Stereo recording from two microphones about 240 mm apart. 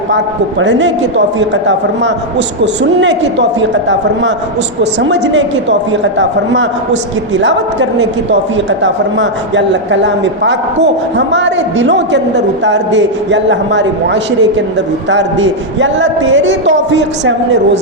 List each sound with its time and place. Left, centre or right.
0.6 s a woman's voice: right